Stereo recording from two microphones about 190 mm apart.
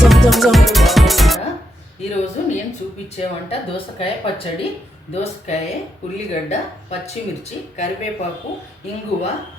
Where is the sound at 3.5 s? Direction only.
30° left (ahead or behind).